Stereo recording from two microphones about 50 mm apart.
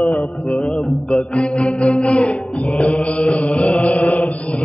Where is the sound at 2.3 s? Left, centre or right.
Left.